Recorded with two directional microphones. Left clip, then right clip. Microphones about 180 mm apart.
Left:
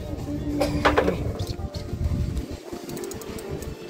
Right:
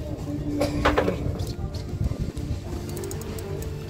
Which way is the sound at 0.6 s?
55° left (ahead or behind).